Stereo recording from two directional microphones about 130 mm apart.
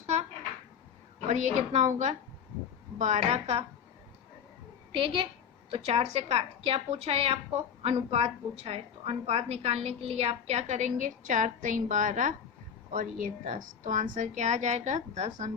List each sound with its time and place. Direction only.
1.3 s a woman's voice: 60° right (ahead or behind)
4.9 s a woman's voice: 40° right (ahead or behind)
5.7 s a woman's voice: 50° right (ahead or behind)